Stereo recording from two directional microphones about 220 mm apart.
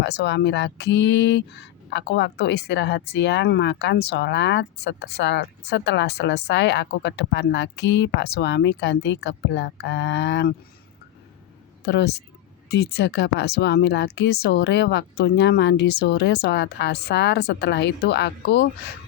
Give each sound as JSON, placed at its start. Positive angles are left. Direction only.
{"t": 0.0, "sound": "speech", "side_deg": 50}
{"t": 11.9, "sound": "speech", "side_deg": 50}